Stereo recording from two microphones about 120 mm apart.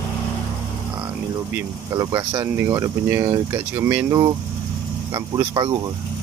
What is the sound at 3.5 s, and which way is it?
Speech, 20° right (ahead or behind).